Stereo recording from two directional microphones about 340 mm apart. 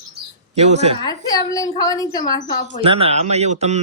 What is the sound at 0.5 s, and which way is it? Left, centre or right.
Speech, centre.